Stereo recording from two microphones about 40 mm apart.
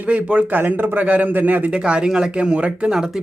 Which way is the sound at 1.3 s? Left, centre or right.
Right.